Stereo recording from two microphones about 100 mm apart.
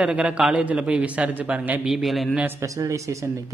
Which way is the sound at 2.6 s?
35° right (ahead or behind).